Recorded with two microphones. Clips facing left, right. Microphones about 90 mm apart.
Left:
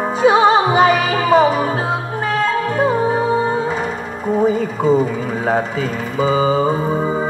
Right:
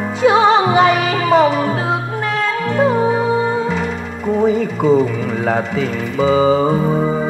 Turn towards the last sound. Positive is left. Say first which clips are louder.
# right 2 dB
turn(degrees=35)  # may be behind; listen again after turning